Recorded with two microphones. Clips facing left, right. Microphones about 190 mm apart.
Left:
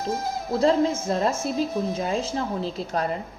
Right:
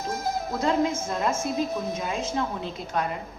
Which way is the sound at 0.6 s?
30° left (ahead or behind).